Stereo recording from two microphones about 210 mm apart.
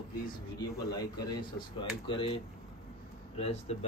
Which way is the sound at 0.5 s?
20° left (ahead or behind).